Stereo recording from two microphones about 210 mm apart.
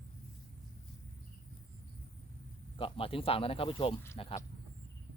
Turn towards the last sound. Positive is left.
turn(degrees=25)  # may be behind; listen again after turning